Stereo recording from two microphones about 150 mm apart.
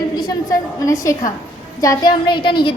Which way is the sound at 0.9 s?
20° left (ahead or behind).